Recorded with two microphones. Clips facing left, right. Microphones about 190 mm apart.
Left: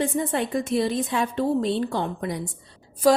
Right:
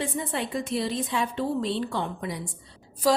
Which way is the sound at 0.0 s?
50° left (ahead or behind).